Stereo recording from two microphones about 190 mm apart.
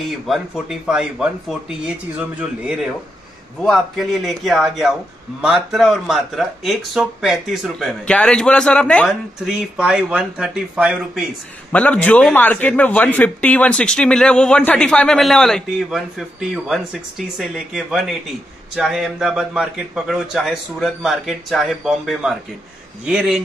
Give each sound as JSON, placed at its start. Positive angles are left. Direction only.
{"t": 0.1, "sound": "a man's voice", "side_deg": 0}
{"t": 9.5, "sound": "a man's voice", "side_deg": -5}
{"t": 11.7, "sound": "a man's voice", "side_deg": 5}